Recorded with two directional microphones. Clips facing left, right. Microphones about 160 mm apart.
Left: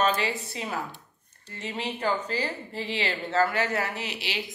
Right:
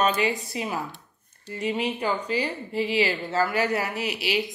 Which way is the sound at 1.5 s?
15° right (ahead or behind).